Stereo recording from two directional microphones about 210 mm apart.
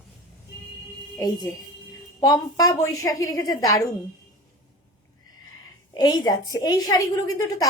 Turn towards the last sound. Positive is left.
turn(degrees=15)  # may be behind; listen again after turning